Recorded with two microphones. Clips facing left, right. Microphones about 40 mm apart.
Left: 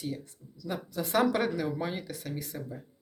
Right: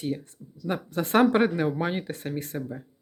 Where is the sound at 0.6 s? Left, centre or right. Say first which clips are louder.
Right 6 dB; right.